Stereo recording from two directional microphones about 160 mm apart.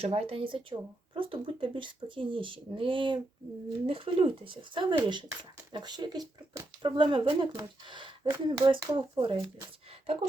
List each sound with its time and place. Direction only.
0.0 s speech: 40° right (ahead or behind)